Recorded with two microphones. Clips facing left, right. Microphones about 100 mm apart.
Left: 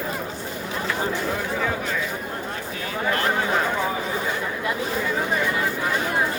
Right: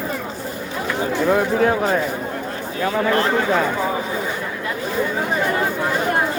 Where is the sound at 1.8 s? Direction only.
50° right (ahead or behind).